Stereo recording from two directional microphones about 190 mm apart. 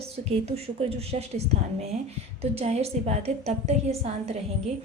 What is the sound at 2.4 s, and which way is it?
A woman's voice, 30° right (ahead or behind).